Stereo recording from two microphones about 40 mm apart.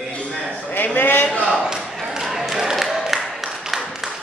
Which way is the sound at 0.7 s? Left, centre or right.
Left.